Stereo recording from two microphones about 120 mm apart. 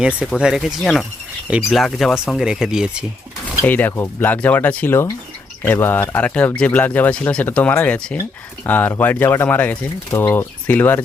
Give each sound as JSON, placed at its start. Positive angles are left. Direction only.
{"t": 0.3, "sound": "speech", "side_deg": -5}
{"t": 3.7, "sound": "speech", "side_deg": 15}